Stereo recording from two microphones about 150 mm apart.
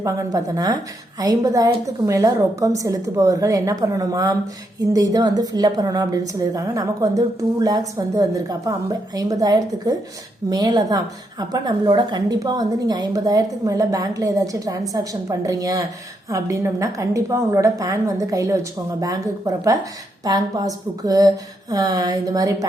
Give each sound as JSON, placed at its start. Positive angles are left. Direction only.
{"t": 0.0, "sound": "a woman's voice", "side_deg": -20}